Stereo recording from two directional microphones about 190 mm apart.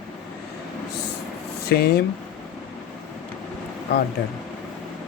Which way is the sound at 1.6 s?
55° left (ahead or behind).